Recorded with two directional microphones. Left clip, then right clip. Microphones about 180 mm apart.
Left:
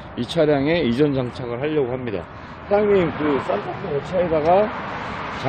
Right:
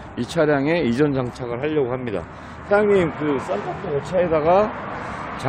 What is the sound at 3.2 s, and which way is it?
Speech, 45° right (ahead or behind).